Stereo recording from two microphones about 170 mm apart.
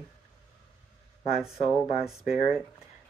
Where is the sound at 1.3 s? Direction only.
Centre (ahead or behind).